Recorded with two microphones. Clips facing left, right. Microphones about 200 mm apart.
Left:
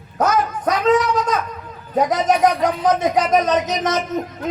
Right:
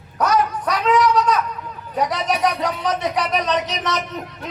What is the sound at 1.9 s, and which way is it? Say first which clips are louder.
Speech: left 5 dB; 45° left (ahead or behind).